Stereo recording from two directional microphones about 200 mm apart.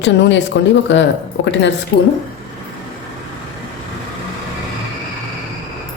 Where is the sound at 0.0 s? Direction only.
65° left (ahead or behind).